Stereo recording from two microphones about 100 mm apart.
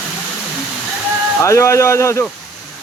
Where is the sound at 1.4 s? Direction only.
30° left (ahead or behind).